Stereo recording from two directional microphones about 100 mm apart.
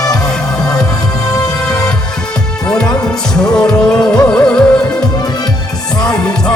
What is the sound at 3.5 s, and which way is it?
Music, 5° left (ahead or behind).